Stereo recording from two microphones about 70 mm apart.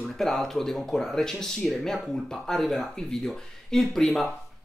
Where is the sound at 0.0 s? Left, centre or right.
Centre.